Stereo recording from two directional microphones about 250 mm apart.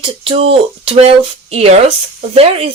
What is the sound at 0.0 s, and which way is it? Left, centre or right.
Speech, right.